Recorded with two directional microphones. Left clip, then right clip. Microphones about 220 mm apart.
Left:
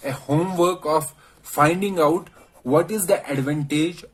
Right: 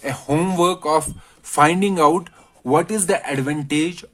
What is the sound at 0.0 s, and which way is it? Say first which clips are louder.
Speech: right 2 dB; 40° right (ahead or behind).